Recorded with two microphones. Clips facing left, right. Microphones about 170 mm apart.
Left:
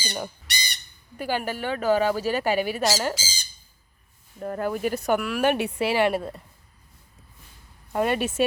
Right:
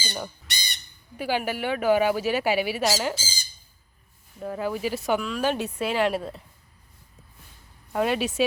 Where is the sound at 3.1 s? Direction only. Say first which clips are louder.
Left 1 dB; 90° left.